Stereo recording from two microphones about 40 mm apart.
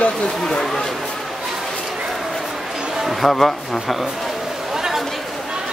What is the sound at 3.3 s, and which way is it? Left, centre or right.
Speech, centre.